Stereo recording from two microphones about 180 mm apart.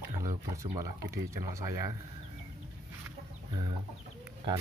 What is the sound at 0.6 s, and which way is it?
Speech, 20° right (ahead or behind).